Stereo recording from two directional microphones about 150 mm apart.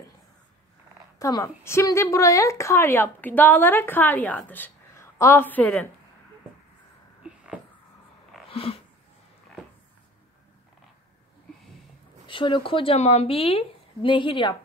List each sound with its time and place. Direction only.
1.2 s a woman's voice: 20° left (ahead or behind)
7.2 s a sound: 5° right (ahead or behind)
8.5 s dog: 40° left (ahead or behind)
12.3 s a woman's voice: 35° left (ahead or behind)